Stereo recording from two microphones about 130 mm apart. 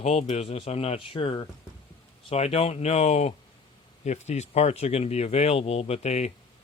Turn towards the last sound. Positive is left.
turn(degrees=55)  # may be behind; listen again after turning